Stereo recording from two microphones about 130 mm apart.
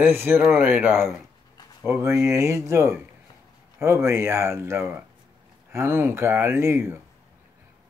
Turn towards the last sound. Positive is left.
turn(degrees=-20)  # may be behind; listen again after turning